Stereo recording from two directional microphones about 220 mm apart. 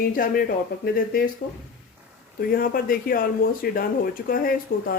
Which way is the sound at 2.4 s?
40° left (ahead or behind).